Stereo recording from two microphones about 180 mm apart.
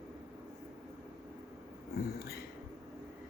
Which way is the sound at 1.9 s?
60° left (ahead or behind).